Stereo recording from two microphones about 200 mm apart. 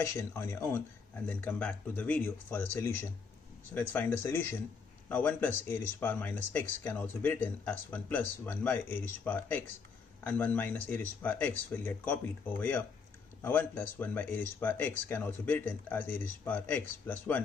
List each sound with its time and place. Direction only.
0.0 s speech: 15° left (ahead or behind)